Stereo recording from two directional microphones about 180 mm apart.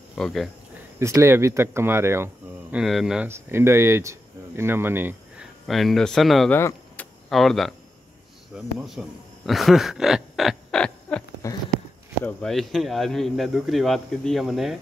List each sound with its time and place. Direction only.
0.2 s speech: centre (ahead or behind)
0.9 s speech: 15° right (ahead or behind)
2.8 s speech: centre (ahead or behind)
3.3 s speech: 15° right (ahead or behind)
5.7 s speech: centre (ahead or behind)
6.5 s vehicle: 10° left (ahead or behind)
8.5 s speech: centre (ahead or behind)
9.5 s a sound: centre (ahead or behind)
12.3 s speech: 5° left (ahead or behind)